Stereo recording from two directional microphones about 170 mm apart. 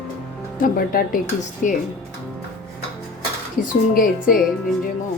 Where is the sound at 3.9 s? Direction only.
55° left (ahead or behind).